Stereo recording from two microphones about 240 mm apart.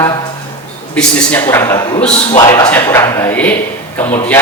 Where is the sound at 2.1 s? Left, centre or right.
Left.